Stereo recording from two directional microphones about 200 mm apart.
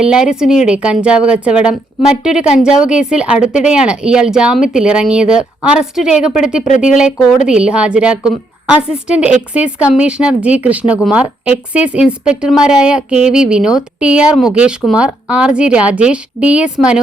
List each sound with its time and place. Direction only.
0.0 s a woman's voice: 5° right (ahead or behind)
6.7 s speech: 40° left (ahead or behind)
6.9 s a woman's voice: 5° right (ahead or behind)